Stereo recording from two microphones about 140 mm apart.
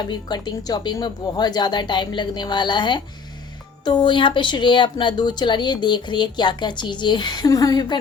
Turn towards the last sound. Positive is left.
turn(degrees=30)  # may be behind; listen again after turning